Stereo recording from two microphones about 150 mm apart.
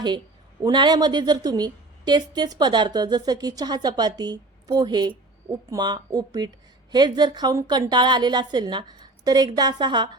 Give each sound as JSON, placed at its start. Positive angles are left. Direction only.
{"t": 0.6, "sound": "a woman's voice", "side_deg": -30}